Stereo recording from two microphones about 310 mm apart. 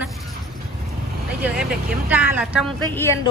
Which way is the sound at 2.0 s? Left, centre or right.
Centre.